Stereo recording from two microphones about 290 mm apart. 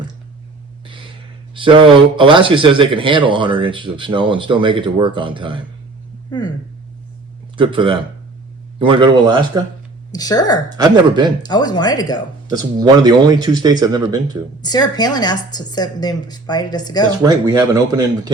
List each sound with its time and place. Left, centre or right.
0.9 s a sound: centre
1.5 s a man's voice: centre
6.3 s speech: centre
7.5 s a man's voice: centre
10.1 s speech: centre
10.8 s a man's voice: centre
11.4 s speech: centre
12.5 s a man's voice: centre
14.6 s speech: centre
17.2 s a man's voice: centre